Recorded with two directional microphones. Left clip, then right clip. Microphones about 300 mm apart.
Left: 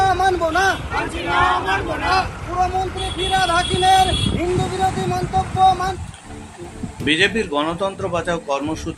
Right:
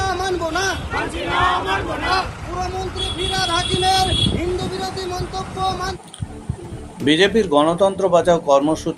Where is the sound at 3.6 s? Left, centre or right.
Centre.